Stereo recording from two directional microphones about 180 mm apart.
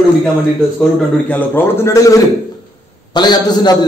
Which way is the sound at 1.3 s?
15° left (ahead or behind).